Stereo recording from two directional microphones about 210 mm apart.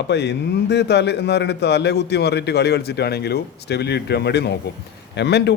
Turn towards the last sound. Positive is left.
turn(degrees=55)  # may be behind; listen again after turning